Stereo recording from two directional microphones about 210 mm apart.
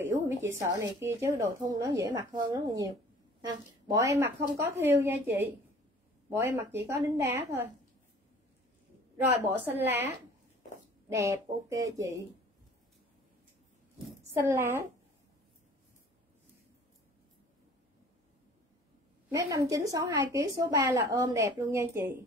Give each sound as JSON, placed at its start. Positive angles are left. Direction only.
{"t": 0.0, "sound": "a woman's voice", "side_deg": -10}
{"t": 9.1, "sound": "a woman's voice", "side_deg": -10}
{"t": 11.1, "sound": "a woman's voice", "side_deg": -15}
{"t": 14.0, "sound": "a woman's voice", "side_deg": -10}
{"t": 19.3, "sound": "a woman's voice", "side_deg": -15}